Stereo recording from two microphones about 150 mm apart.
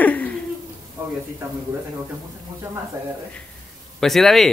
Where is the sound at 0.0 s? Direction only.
10° left (ahead or behind).